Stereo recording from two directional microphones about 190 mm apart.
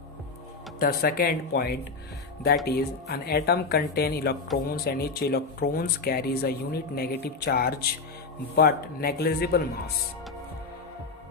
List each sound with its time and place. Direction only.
0.8 s speech: 50° left (ahead or behind)